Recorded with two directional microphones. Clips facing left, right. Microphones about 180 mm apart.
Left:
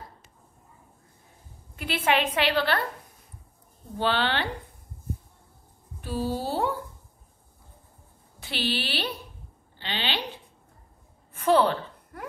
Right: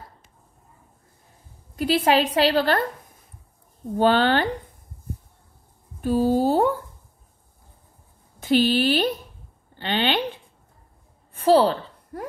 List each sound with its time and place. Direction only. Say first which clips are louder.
1.8 s a woman's voice: right 6 dB; 35° right (ahead or behind)
4.0 s speech: right 8 dB; 45° right (ahead or behind)
5.9 s speech: right 9 dB; 45° right (ahead or behind)
8.4 s speech: right 11 dB; 45° right (ahead or behind)
11.3 s a sound: right 4 dB; 35° right (ahead or behind)